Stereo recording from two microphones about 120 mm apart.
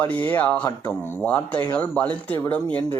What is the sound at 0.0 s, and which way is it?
Speech, 15° left (ahead or behind).